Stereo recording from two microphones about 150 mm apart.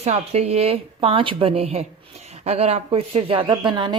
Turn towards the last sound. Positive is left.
turn(degrees=-30)  # may be behind; listen again after turning